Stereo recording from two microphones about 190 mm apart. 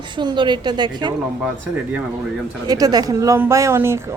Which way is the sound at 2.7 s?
20° right (ahead or behind).